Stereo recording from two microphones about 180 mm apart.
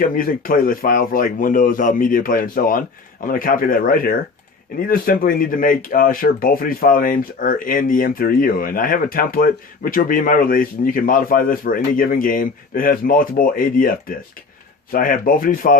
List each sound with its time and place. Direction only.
0.1 s speech: 50° left (ahead or behind)